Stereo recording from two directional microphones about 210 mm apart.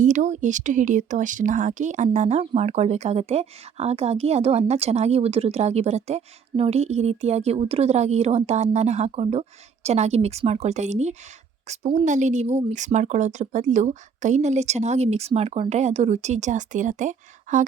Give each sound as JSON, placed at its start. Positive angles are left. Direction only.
{"t": 0.0, "sound": "speech", "side_deg": -35}